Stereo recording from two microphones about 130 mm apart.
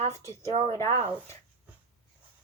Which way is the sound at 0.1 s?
20° left (ahead or behind).